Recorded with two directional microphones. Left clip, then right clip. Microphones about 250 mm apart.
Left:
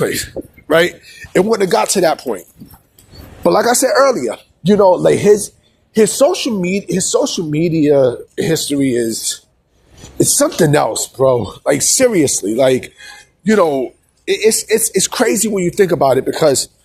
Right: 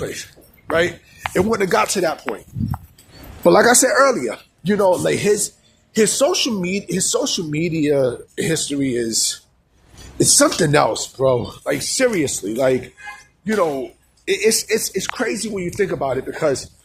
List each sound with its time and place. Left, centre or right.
0.0 s speech: left
1.3 s a man's voice: centre
3.4 s a man's voice: centre
4.6 s a man's voice: centre; by 13.7 s left
14.3 s a man's voice: centre
14.9 s speech: left